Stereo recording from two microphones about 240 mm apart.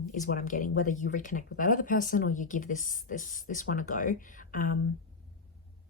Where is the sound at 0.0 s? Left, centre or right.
Left.